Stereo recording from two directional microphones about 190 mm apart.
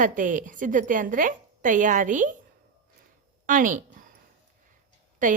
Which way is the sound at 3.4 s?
45° right (ahead or behind).